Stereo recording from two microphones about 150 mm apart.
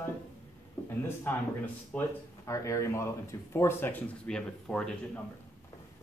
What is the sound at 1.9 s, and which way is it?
Speech, 5° left (ahead or behind).